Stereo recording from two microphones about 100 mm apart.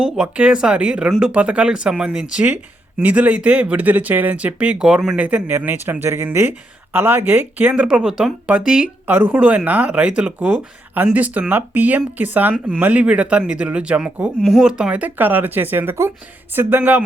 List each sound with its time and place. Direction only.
0.0 s speech: 10° right (ahead or behind)
7.8 s speech: 10° right (ahead or behind)